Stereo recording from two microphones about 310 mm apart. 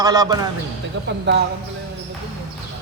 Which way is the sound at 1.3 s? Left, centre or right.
Right.